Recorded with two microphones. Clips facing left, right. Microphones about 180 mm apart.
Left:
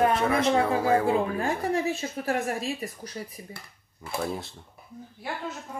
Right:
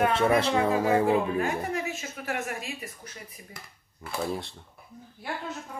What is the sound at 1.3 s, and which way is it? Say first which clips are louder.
A woman's voice: left 2 dB; 35° left (ahead or behind).